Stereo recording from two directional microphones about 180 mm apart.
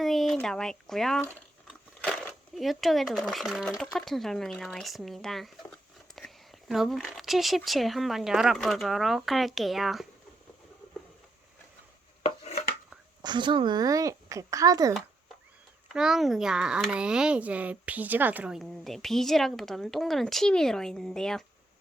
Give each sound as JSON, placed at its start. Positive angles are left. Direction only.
{"t": 0.0, "sound": "a sound", "side_deg": 0}
{"t": 0.3, "sound": "speech", "side_deg": 5}
{"t": 2.6, "sound": "speech", "side_deg": 0}
{"t": 12.4, "sound": "chopping", "side_deg": 35}
{"t": 13.2, "sound": "speech", "side_deg": -25}
{"t": 15.9, "sound": "speech", "side_deg": -5}